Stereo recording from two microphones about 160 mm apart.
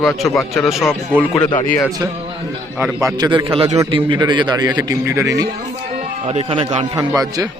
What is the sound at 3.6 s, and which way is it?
Speech, 20° right (ahead or behind).